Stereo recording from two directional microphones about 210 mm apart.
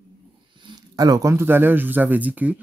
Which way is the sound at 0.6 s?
20° right (ahead or behind).